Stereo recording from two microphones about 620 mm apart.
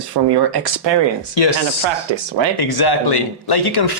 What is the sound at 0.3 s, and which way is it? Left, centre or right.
Speech, right.